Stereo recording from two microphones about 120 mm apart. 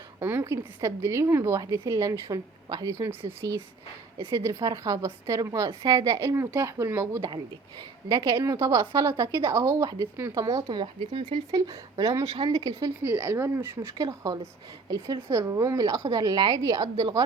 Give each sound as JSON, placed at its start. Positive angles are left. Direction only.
{"t": 0.2, "sound": "a woman's voice", "side_deg": -15}
{"t": 2.9, "sound": "a woman's voice", "side_deg": -20}
{"t": 5.8, "sound": "a woman's voice", "side_deg": -35}
{"t": 8.1, "sound": "a woman's voice", "side_deg": -35}
{"t": 11.1, "sound": "speech", "side_deg": -40}
{"t": 11.5, "sound": "a woman's voice", "side_deg": -30}
{"t": 13.0, "sound": "a woman's voice", "side_deg": -20}